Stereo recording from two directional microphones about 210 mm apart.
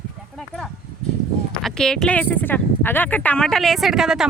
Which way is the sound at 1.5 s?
5° left (ahead or behind).